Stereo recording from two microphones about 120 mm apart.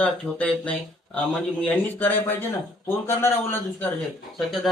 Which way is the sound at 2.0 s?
15° left (ahead or behind).